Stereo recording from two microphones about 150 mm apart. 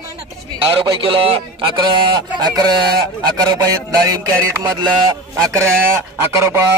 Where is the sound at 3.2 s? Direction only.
25° right (ahead or behind).